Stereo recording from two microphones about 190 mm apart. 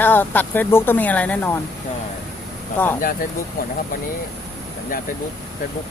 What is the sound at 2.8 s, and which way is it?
Speech, 10° left (ahead or behind).